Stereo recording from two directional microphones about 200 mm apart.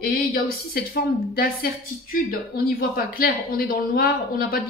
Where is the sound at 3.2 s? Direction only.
45° left (ahead or behind).